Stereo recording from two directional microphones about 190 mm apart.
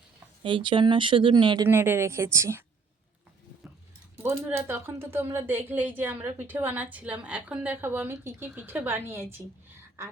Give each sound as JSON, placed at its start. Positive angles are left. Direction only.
{"t": 0.4, "sound": "speech", "side_deg": -25}
{"t": 1.7, "sound": "a woman's voice", "side_deg": -10}
{"t": 4.4, "sound": "a woman's voice", "side_deg": -10}